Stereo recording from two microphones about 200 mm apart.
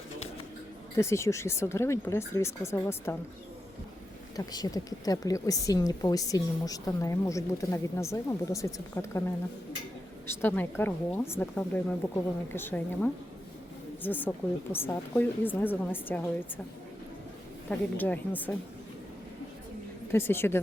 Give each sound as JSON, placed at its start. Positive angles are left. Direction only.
{"t": 0.9, "sound": "a woman's voice", "side_deg": 15}
{"t": 4.4, "sound": "a woman's voice", "side_deg": 20}
{"t": 10.2, "sound": "a woman's voice", "side_deg": 10}
{"t": 17.7, "sound": "a woman's voice", "side_deg": 10}
{"t": 20.1, "sound": "a woman's voice", "side_deg": 10}